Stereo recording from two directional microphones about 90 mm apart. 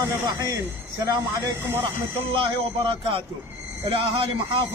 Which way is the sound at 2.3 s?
75° right (ahead or behind).